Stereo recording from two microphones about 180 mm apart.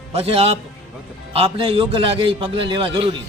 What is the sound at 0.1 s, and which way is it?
A man's voice, 35° right (ahead or behind).